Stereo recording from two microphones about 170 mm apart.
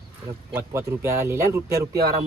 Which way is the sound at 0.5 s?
15° right (ahead or behind).